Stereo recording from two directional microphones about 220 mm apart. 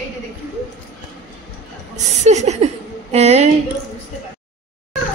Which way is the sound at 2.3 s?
30° right (ahead or behind).